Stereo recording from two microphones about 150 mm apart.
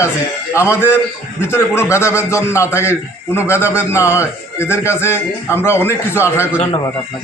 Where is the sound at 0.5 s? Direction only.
20° left (ahead or behind).